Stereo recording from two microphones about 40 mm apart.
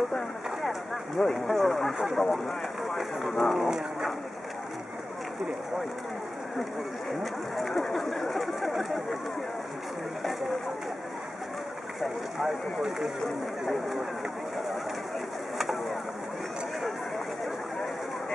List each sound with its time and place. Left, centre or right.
0.6 s speech: centre
7.1 s speech: centre
12.0 s speech: centre
15.5 s a sound: centre